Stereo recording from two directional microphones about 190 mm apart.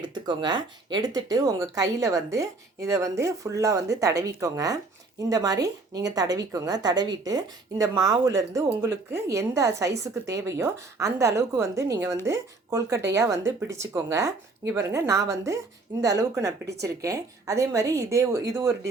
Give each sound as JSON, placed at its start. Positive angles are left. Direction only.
{"t": 0.1, "sound": "a woman's voice", "side_deg": -25}